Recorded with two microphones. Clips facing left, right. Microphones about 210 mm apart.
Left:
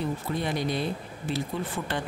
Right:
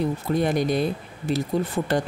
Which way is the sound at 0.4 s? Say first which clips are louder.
Right 8 dB; 45° right (ahead or behind).